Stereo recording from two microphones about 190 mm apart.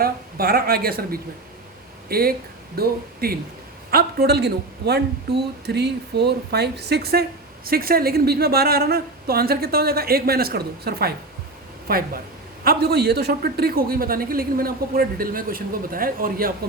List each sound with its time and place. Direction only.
0.0 s a man's voice: 50° right (ahead or behind)